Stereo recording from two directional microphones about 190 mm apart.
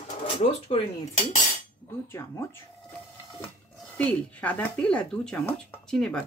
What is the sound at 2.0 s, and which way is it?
Speech, 15° left (ahead or behind).